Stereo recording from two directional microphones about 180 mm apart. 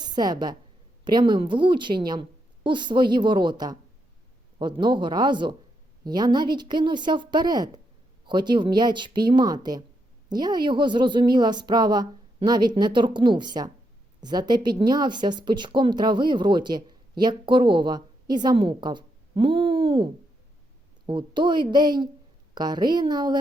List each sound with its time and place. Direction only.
0.0 s a woman's voice: 25° right (ahead or behind)
21.1 s speech: 25° right (ahead or behind)